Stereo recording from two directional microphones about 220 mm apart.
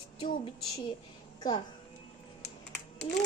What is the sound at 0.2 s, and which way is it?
A woman's voice, 25° left (ahead or behind).